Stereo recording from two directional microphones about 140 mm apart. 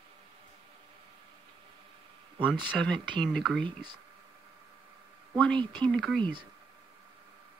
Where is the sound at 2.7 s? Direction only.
5° left (ahead or behind).